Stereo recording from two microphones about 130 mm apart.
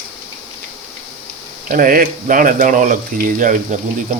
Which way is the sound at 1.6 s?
90° right.